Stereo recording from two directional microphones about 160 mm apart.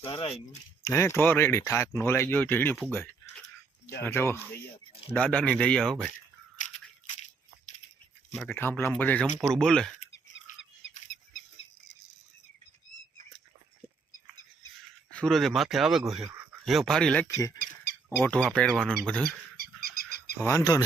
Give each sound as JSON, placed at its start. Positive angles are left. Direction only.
{"t": 0.0, "sound": "speech", "side_deg": 35}
{"t": 0.9, "sound": "speech", "side_deg": 15}
{"t": 6.1, "sound": "scissors", "side_deg": 45}
{"t": 8.4, "sound": "speech", "side_deg": 15}
{"t": 15.1, "sound": "speech", "side_deg": 5}
{"t": 17.2, "sound": "speech", "side_deg": 20}
{"t": 18.2, "sound": "speech", "side_deg": 5}
{"t": 19.5, "sound": "bird", "side_deg": 70}
{"t": 20.4, "sound": "speech", "side_deg": 20}